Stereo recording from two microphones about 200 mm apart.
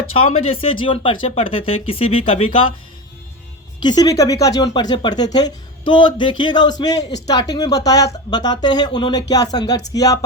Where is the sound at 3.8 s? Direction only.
20° left (ahead or behind).